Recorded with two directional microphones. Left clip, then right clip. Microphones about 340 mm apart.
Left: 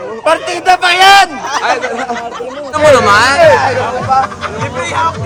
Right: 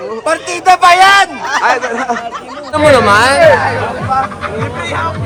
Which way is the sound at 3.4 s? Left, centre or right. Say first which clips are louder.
Left 1 dB; left.